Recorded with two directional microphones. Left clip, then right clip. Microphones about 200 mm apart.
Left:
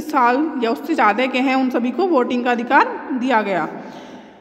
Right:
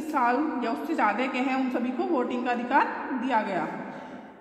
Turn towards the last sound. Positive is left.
turn(degrees=45)  # may be behind; listen again after turning